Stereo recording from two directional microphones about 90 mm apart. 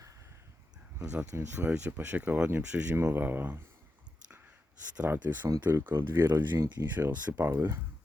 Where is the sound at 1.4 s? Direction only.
25° right (ahead or behind).